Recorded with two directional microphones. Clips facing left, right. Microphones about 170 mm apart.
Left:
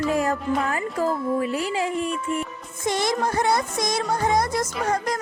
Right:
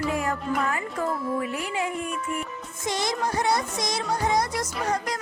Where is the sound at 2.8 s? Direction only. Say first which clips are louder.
Left 4 dB; 55° left (ahead or behind).